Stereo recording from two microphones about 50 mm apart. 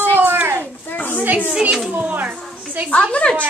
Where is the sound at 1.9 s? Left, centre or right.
Right.